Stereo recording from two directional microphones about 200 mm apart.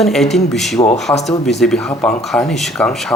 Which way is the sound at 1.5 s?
Centre (ahead or behind).